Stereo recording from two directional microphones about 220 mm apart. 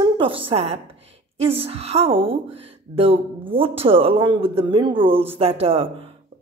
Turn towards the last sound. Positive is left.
turn(degrees=-25)  # may be behind; listen again after turning